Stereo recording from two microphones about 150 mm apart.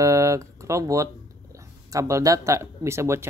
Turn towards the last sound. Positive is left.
turn(degrees=-20)  # may be behind; listen again after turning